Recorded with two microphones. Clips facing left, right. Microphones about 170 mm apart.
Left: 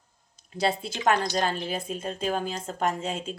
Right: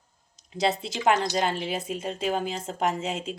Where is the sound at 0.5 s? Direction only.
20° right (ahead or behind).